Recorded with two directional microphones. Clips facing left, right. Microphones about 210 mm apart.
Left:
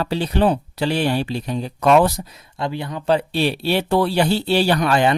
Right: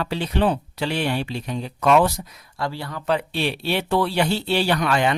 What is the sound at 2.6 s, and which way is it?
Speech, 20° left (ahead or behind).